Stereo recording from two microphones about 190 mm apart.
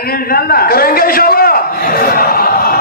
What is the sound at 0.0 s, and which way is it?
A man's voice, 50° left (ahead or behind).